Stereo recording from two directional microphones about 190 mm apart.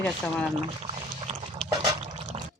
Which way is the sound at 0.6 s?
35° right (ahead or behind).